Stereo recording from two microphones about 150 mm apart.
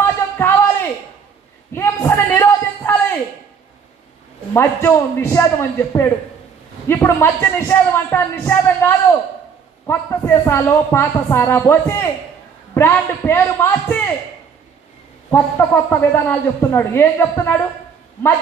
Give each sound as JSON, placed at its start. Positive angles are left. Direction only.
{"t": 0.0, "sound": "a sound", "side_deg": 15}
{"t": 4.6, "sound": "a woman's voice", "side_deg": 15}
{"t": 15.3, "sound": "a woman's voice", "side_deg": 15}